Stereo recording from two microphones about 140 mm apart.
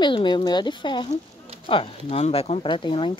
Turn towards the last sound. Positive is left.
turn(degrees=35)  # may be behind; listen again after turning